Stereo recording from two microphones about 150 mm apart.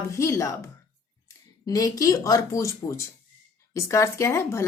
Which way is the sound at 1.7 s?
25° left (ahead or behind).